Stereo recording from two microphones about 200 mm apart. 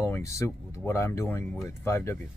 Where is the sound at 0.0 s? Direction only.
15° left (ahead or behind).